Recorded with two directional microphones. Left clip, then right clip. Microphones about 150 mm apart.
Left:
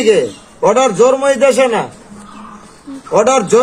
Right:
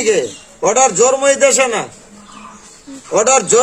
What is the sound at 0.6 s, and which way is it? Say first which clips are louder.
A man's voice: left 2 dB; 65° right (ahead or behind).